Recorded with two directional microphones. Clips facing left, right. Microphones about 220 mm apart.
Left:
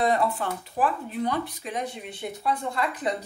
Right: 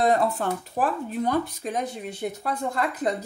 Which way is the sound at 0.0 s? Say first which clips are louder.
Right 2 dB; 45° right (ahead or behind).